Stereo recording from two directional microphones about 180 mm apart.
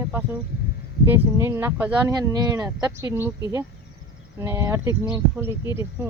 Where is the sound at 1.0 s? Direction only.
15° right (ahead or behind).